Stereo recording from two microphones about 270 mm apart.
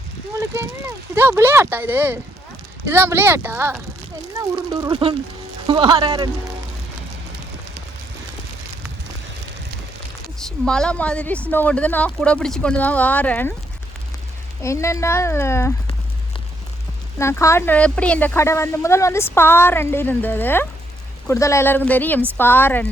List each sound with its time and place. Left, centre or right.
0.3 s speech: centre
10.4 s speech: centre
14.6 s speech: centre
17.2 s speech: centre